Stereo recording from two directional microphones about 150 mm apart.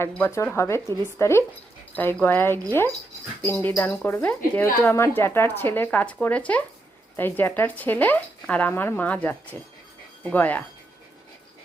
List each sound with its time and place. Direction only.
0.0 s speech: 15° left (ahead or behind)